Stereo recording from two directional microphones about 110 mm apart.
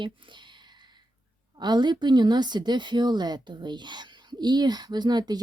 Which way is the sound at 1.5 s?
40° right (ahead or behind).